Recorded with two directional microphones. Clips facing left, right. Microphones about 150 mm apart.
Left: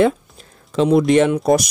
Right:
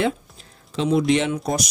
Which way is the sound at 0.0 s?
50° left (ahead or behind).